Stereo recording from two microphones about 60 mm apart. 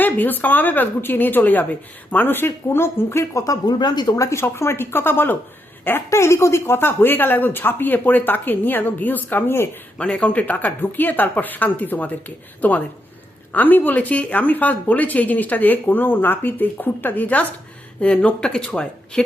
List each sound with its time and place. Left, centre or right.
0.0 s speech: left
3.3 s speech: left
4.2 s speech: left
6.1 s speech: left
10.0 s speech: centre